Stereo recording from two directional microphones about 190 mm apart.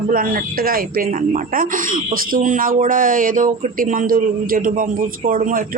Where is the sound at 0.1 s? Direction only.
50° right (ahead or behind).